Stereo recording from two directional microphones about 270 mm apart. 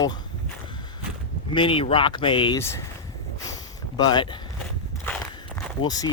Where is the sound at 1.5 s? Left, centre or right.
Centre.